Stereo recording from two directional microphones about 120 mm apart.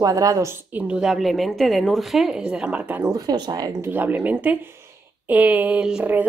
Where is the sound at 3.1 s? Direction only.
35° right (ahead or behind).